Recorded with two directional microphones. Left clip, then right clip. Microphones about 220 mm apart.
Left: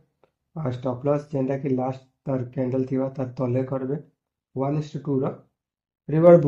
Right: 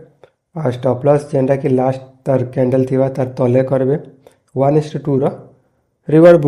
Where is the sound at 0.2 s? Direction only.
40° right (ahead or behind).